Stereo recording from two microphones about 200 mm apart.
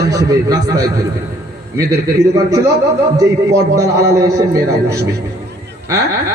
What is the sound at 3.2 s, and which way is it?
Music, 15° right (ahead or behind).